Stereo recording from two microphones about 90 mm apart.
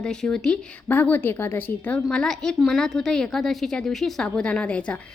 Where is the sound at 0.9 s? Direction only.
20° left (ahead or behind).